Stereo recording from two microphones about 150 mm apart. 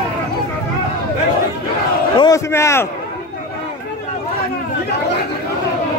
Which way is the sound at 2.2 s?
20° left (ahead or behind).